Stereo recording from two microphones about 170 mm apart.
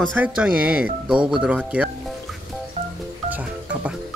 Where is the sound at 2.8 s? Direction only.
40° right (ahead or behind).